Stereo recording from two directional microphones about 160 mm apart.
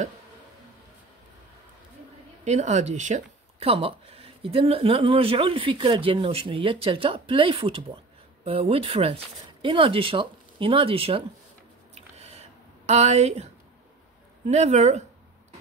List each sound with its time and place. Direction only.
2.4 s speech: 45° right (ahead or behind)
11.9 s a sound: 40° right (ahead or behind)
14.5 s speech: 45° right (ahead or behind)